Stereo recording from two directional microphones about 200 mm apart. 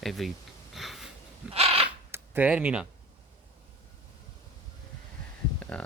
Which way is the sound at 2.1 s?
10° right (ahead or behind).